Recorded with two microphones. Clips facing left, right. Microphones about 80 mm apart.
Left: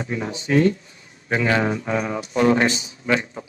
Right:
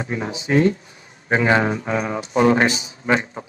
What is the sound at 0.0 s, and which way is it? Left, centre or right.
A man's voice, right.